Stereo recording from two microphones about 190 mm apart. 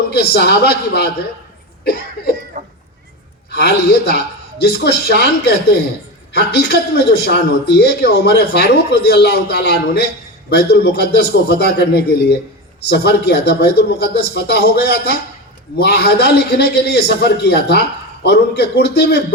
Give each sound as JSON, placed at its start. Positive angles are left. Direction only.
{"t": 0.1, "sound": "a man's voice", "side_deg": 60}
{"t": 1.8, "sound": "cough", "side_deg": 55}
{"t": 2.5, "sound": "a sound", "side_deg": -40}
{"t": 3.5, "sound": "a man's voice", "side_deg": 60}
{"t": 6.3, "sound": "a man's voice", "side_deg": 60}